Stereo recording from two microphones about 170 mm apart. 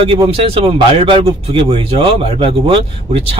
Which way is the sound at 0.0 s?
35° right (ahead or behind).